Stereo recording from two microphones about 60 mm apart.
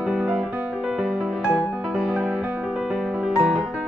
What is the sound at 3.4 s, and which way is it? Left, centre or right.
Music, centre.